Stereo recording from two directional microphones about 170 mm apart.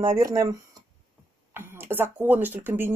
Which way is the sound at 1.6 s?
15° right (ahead or behind).